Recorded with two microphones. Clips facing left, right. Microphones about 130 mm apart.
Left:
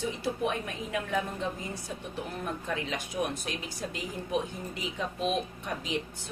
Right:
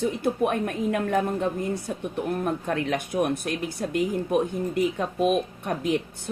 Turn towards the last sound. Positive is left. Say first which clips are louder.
# right 8 dB
turn(degrees=-55)  # may be behind; listen again after turning